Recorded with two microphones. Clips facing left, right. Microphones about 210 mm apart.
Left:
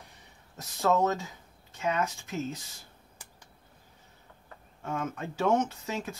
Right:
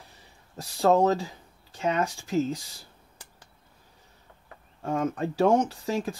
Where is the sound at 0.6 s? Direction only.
30° right (ahead or behind).